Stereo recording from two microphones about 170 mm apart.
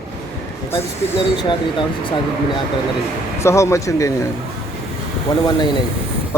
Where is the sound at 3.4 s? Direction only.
15° left (ahead or behind).